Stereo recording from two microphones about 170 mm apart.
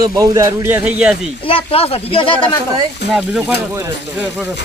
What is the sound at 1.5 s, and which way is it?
Speech, 35° left (ahead or behind).